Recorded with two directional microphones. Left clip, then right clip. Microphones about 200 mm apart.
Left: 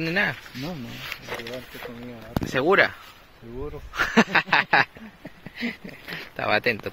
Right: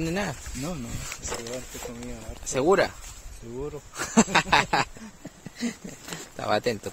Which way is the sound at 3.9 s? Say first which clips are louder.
Left 3 dB; centre (ahead or behind).